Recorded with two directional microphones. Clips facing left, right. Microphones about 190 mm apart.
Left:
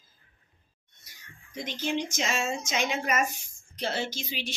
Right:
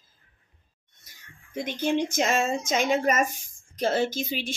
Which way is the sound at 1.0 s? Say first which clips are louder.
Even; 55° right (ahead or behind).